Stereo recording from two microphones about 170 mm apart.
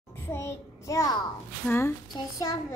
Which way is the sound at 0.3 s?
15° left (ahead or behind).